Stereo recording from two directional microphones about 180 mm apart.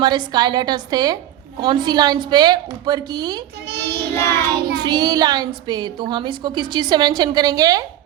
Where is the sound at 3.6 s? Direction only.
65° right (ahead or behind).